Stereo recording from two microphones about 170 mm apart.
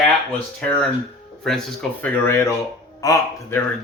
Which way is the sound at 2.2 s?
15° left (ahead or behind).